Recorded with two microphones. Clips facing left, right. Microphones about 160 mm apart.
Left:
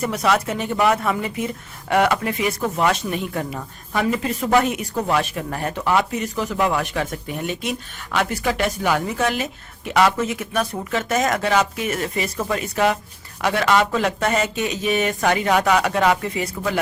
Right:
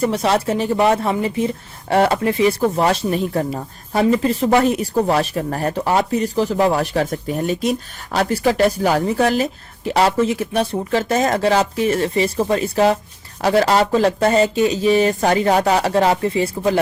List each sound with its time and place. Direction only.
0.0 s speech: 30° right (ahead or behind)